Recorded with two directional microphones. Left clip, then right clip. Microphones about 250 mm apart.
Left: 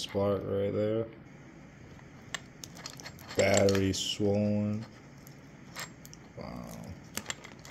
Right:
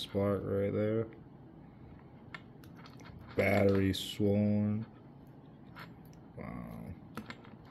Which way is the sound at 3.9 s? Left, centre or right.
Right.